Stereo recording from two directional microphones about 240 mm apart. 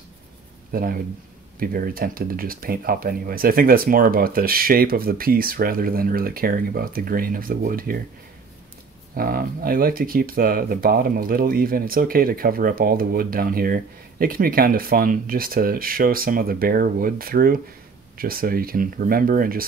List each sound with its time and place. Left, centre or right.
0.7 s speech: right
9.1 s speech: right